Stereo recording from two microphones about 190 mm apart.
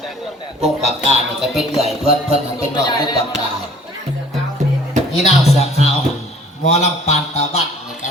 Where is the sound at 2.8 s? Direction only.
20° left (ahead or behind).